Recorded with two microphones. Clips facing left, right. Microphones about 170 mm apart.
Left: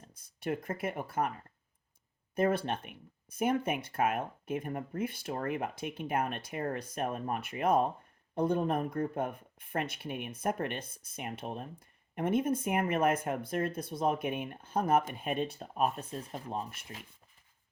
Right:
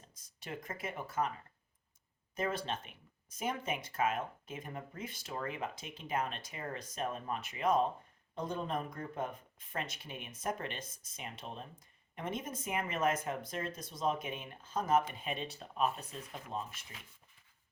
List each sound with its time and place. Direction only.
0.1 s speech: 55° left (ahead or behind)
2.3 s speech: 55° left (ahead or behind)